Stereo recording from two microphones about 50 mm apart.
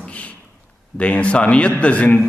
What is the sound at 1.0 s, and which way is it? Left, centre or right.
A man's voice, left.